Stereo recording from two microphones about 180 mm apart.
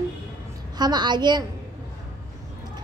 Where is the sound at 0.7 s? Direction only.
25° right (ahead or behind).